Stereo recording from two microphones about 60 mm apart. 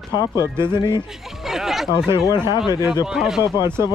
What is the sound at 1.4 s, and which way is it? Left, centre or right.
Speech, centre.